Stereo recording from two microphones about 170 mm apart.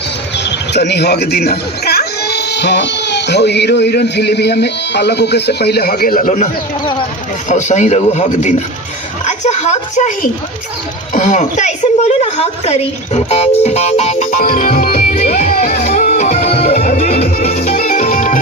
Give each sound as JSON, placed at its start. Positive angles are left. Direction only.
{"t": 0.3, "sound": "a woman's voice", "side_deg": 85}
{"t": 11.1, "sound": "a woman's voice", "side_deg": 45}
{"t": 15.1, "sound": "music", "side_deg": 40}
{"t": 17.6, "sound": "music", "side_deg": 55}